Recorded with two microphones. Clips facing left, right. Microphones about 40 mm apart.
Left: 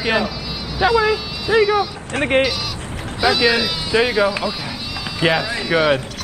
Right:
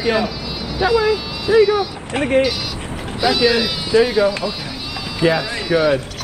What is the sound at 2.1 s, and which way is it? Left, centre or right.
Speech, left.